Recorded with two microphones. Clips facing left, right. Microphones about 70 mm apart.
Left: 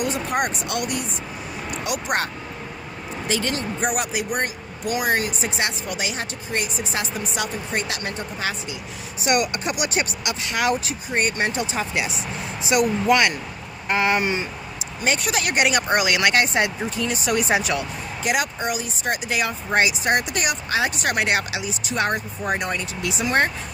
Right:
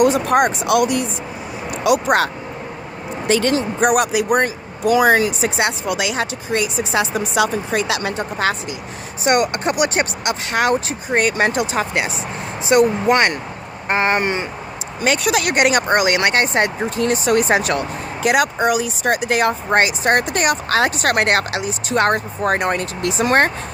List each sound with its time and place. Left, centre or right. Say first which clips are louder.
0.0 s speech: right 9 dB; right
3.2 s speech: right 8 dB; right
5.4 s speech: right 6 dB; right
9.2 s speech: right 5 dB; right
11.1 s speech: right 6 dB; right
12.6 s speech: right 5 dB; right
15.0 s speech: right 5 dB; right